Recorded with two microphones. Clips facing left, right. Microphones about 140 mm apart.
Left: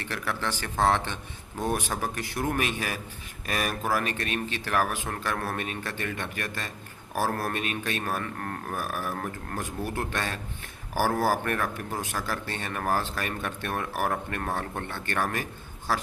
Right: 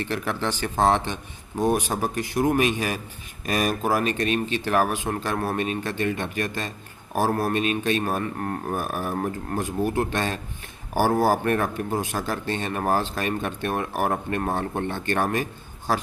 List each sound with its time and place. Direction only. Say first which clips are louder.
0.0 s speech: right 5 dB; 20° right (ahead or behind)